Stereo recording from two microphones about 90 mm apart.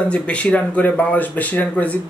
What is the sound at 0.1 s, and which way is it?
Speech, 15° left (ahead or behind).